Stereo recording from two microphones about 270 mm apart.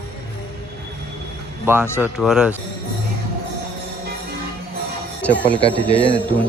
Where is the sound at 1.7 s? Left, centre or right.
Centre.